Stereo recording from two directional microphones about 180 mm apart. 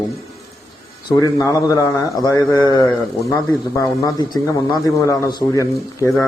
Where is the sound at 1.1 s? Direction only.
20° left (ahead or behind).